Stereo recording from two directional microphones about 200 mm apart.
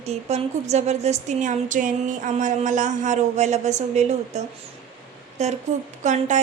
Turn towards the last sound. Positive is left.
turn(degrees=-35)  # may be behind; listen again after turning